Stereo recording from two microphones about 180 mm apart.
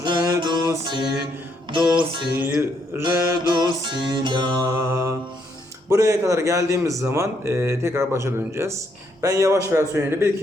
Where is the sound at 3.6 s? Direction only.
25° right (ahead or behind).